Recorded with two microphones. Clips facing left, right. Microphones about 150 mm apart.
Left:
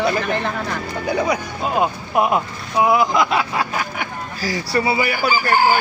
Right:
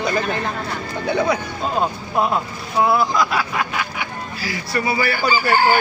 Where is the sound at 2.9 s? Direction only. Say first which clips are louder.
Left 3 dB; 20° left (ahead or behind).